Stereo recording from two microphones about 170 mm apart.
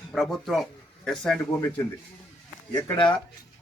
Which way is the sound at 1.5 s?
20° left (ahead or behind).